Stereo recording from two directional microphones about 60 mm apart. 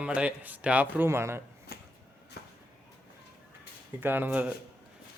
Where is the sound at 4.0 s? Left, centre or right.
Right.